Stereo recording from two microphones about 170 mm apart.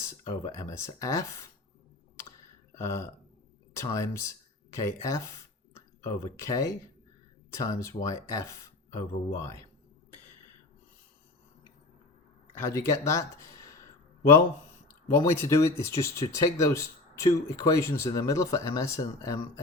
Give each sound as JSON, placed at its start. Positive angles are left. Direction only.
{"t": 0.0, "sound": "speech", "side_deg": 15}
{"t": 2.7, "sound": "speech", "side_deg": 15}
{"t": 12.5, "sound": "speech", "side_deg": 15}
{"t": 15.2, "sound": "speech", "side_deg": 20}